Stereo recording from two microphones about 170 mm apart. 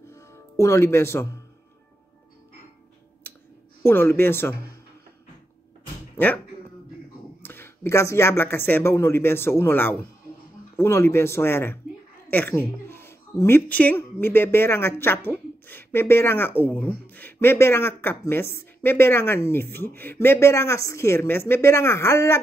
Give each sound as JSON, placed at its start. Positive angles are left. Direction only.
{"t": 0.1, "sound": "music", "side_deg": 15}
{"t": 3.8, "sound": "speech", "side_deg": 15}
{"t": 6.1, "sound": "speech", "side_deg": 10}
{"t": 7.4, "sound": "speech", "side_deg": 15}